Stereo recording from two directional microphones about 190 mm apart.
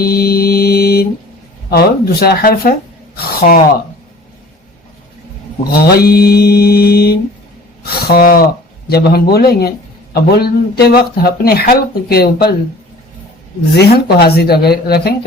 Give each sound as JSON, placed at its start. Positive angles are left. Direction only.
{"t": 0.0, "sound": "mantra", "side_deg": 55}
{"t": 5.8, "sound": "mantra", "side_deg": 55}
{"t": 7.9, "sound": "speech", "side_deg": 50}
{"t": 13.7, "sound": "speech", "side_deg": 55}